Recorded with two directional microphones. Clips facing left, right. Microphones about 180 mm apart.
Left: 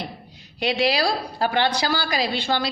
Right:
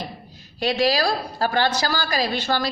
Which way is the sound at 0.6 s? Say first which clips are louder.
Right 1 dB; 15° left (ahead or behind).